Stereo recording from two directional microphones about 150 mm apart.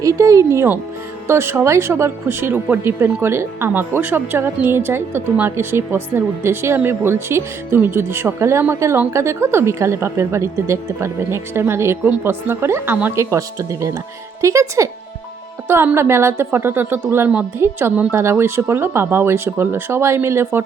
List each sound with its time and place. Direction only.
0.0 s speech: 20° right (ahead or behind)